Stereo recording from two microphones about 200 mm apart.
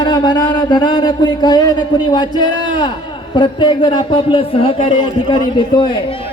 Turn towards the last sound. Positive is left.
turn(degrees=25)  # may be behind; listen again after turning